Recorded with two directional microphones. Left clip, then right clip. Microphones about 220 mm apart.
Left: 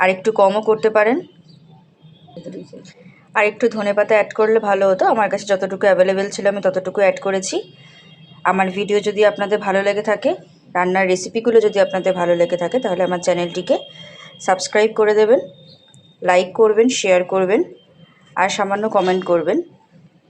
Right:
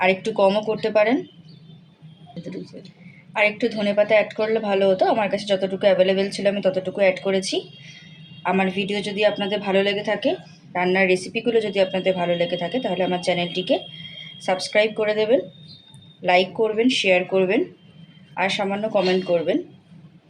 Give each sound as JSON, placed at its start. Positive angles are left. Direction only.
{"t": 0.0, "sound": "a woman's voice", "side_deg": 15}
{"t": 3.3, "sound": "a woman's voice", "side_deg": 15}